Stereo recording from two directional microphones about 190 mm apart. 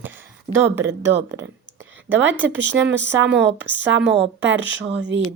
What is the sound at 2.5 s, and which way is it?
Speech, 70° right (ahead or behind).